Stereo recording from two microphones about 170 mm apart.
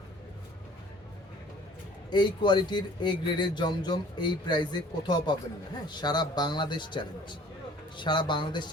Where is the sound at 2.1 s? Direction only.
25° left (ahead or behind).